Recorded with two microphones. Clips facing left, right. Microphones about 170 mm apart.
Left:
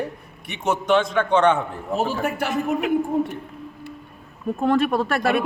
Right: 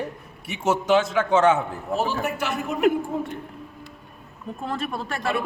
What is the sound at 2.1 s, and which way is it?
Speech, 55° left (ahead or behind).